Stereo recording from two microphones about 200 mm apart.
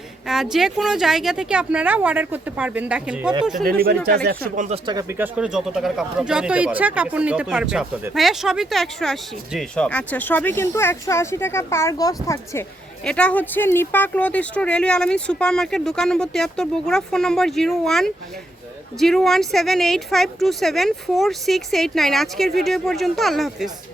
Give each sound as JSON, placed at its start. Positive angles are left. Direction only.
{"t": 0.3, "sound": "speech", "side_deg": 0}
{"t": 3.6, "sound": "speech", "side_deg": -50}
{"t": 4.9, "sound": "speech", "side_deg": -15}
{"t": 13.1, "sound": "speech", "side_deg": 5}